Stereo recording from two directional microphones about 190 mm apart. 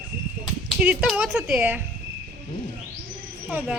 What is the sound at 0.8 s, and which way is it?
A woman's voice, 5° right (ahead or behind).